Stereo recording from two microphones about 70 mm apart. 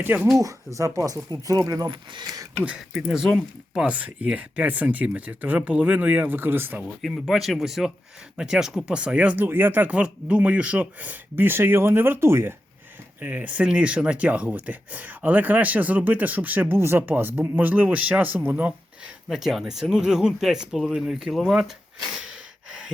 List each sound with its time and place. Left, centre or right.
0.0 s speech: right
0.3 s speech: right
2.6 s speech: centre; by 6.8 s right
7.3 s speech: centre; by 12.5 s right
13.2 s speech: right
19.0 s speech: centre